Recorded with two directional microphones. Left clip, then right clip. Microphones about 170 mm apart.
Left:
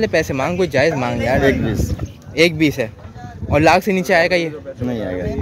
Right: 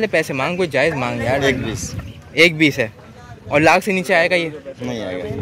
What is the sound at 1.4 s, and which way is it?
Speech, 50° left (ahead or behind).